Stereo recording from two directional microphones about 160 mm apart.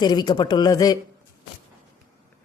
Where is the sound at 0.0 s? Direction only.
25° left (ahead or behind).